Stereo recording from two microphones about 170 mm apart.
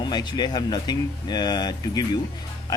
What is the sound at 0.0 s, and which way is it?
Speech, 25° left (ahead or behind).